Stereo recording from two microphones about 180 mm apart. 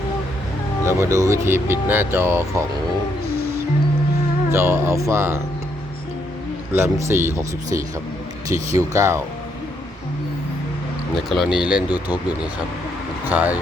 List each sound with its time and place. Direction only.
0.9 s speech: 15° right (ahead or behind)
4.5 s speech: 15° right (ahead or behind)
6.7 s speech: 15° right (ahead or behind)
11.3 s speech: centre (ahead or behind)
13.3 s speech: 10° right (ahead or behind)